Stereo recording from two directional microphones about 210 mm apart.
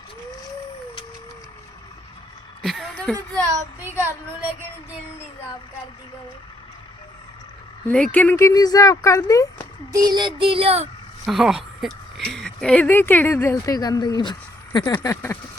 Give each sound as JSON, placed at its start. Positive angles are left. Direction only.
{"t": 2.6, "sound": "a sound", "side_deg": 0}
{"t": 3.4, "sound": "speech", "side_deg": -10}
{"t": 7.9, "sound": "speech", "side_deg": 5}
{"t": 9.9, "sound": "child singing", "side_deg": -20}
{"t": 11.3, "sound": "speech", "side_deg": 0}